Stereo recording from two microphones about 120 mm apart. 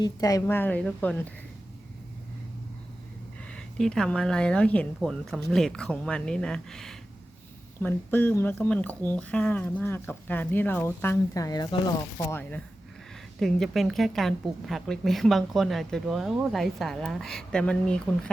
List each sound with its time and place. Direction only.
0.0 s speech: 30° left (ahead or behind); by 1.3 s 10° left (ahead or behind)
3.4 s a woman's voice: 5° left (ahead or behind)
7.8 s speech: 15° left (ahead or behind); by 11.8 s 35° left (ahead or behind)
12.3 s speech: 15° left (ahead or behind)
13.4 s a woman's voice: centre (ahead or behind)